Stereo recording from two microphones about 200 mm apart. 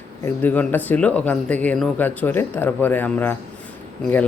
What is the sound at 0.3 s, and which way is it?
Speech, 10° left (ahead or behind).